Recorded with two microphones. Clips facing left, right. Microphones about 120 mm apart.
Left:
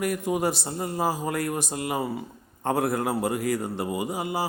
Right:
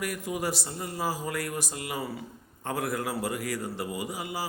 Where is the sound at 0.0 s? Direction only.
25° left (ahead or behind).